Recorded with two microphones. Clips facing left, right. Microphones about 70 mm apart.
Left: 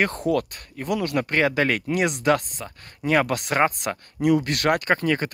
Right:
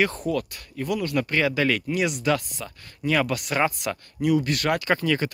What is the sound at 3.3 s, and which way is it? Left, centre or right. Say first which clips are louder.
Speech: left 3 dB; left.